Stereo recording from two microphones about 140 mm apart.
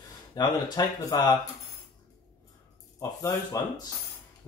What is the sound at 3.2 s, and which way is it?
Speech, 25° left (ahead or behind).